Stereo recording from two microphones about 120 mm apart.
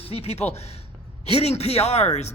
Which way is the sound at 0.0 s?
55° left (ahead or behind).